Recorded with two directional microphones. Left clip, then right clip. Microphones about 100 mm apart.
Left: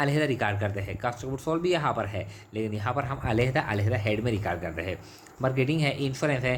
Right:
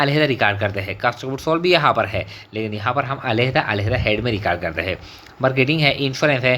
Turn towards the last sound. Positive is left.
turn(degrees=-35)  # may be behind; listen again after turning